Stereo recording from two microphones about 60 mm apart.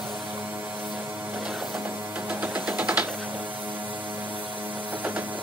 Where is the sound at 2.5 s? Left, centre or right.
Centre.